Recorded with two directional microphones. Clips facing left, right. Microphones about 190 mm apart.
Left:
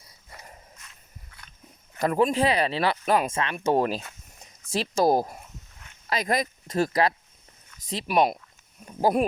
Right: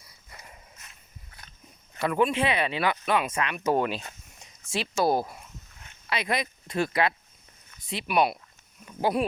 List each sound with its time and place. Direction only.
2.0 s speech: 40° left (ahead or behind)
3.3 s speech: 30° left (ahead or behind)